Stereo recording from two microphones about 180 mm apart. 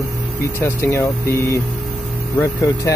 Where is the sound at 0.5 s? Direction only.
15° left (ahead or behind).